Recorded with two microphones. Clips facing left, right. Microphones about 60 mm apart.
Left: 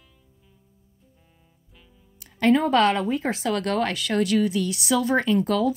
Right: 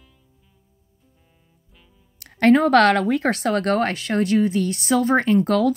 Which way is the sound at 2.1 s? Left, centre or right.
Right.